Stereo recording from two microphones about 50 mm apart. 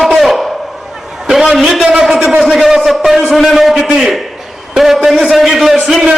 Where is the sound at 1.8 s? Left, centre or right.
Right.